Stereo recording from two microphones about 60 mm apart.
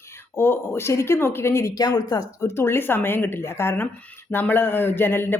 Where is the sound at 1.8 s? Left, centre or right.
Left.